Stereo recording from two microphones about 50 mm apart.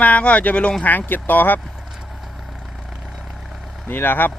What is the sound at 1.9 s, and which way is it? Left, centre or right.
Vehicle, centre.